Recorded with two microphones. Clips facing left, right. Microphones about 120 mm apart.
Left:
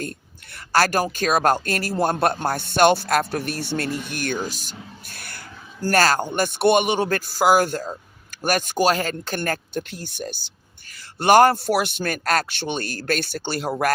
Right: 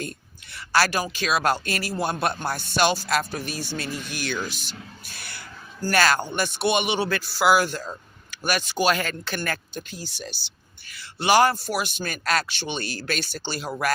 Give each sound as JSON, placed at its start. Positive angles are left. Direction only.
{"t": 0.0, "sound": "speech", "side_deg": 50}
{"t": 4.1, "sound": "speech", "side_deg": 50}
{"t": 9.7, "sound": "a man's voice", "side_deg": 65}